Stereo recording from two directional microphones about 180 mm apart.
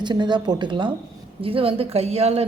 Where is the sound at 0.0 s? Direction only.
25° right (ahead or behind).